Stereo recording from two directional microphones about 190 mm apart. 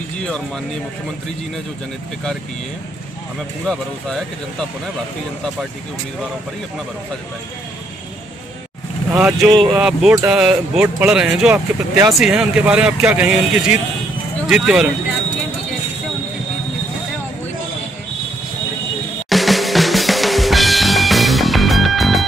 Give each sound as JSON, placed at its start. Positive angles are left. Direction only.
{"t": 3.6, "sound": "speech", "side_deg": 5}
{"t": 9.1, "sound": "speech", "side_deg": -5}
{"t": 9.5, "sound": "speech", "side_deg": -20}
{"t": 9.8, "sound": "speech", "side_deg": -5}
{"t": 12.2, "sound": "speech", "side_deg": -5}
{"t": 19.2, "sound": "drum kit", "side_deg": 0}